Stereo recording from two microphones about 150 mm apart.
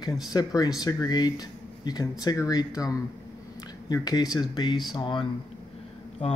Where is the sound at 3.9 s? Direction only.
25° left (ahead or behind).